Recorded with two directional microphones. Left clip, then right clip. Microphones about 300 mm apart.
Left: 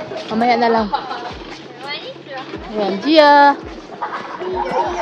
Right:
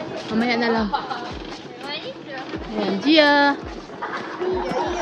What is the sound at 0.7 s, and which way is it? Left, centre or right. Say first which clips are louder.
Speech: left 5 dB; centre.